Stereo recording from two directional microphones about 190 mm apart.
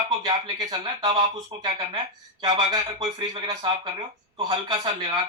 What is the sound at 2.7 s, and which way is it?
Speech, 20° right (ahead or behind).